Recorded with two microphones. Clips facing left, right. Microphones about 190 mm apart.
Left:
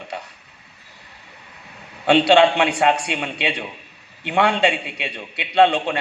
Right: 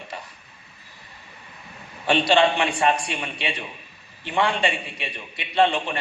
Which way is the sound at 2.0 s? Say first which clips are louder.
Left 5 dB; 70° left (ahead or behind).